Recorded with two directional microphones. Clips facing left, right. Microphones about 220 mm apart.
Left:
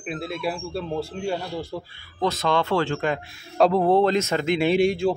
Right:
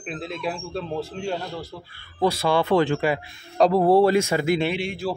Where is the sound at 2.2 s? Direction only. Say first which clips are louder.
Right 2 dB; 10° right (ahead or behind).